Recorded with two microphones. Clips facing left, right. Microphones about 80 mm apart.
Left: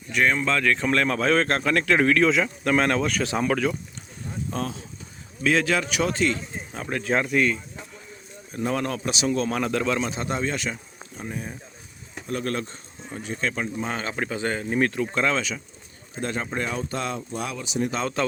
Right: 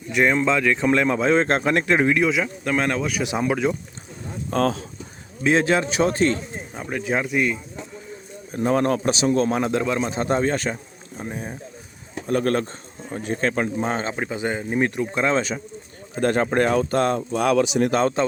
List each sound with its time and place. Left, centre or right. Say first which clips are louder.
0.1 s a man's voice: right 3 dB; centre
2.3 s a man's voice: left 1 dB; centre
4.5 s speech: right 11 dB; right
5.4 s speech: right 3 dB; right
6.9 s a man's voice: even; centre
8.5 s speech: right 6 dB; right
9.6 s speech: right 2 dB; right
10.1 s speech: right 6 dB; right
12.3 s speech: right 7 dB; right
14.2 s speech: right 1 dB; centre
15.4 s speech: right 5 dB; right
16.2 s speech: right 9 dB; right
17.3 s speech: right 10 dB; right
18.2 s speech: right 3 dB; right